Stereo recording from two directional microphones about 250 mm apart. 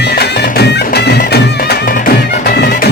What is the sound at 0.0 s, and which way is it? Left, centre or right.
Music, left.